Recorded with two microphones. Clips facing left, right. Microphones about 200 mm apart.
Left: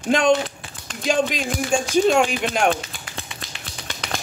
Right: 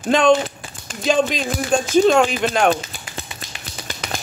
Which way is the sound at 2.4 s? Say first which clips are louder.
Right 3 dB; 40° right (ahead or behind).